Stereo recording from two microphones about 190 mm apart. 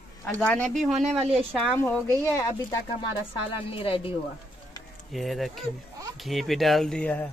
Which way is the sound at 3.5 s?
30° left (ahead or behind).